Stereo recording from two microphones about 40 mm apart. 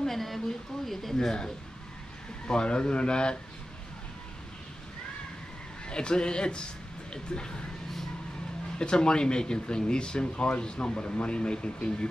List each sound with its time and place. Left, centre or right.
0.0 s a woman's voice: centre; by 3.3 s left
5.9 s speech: left
8.7 s speech: left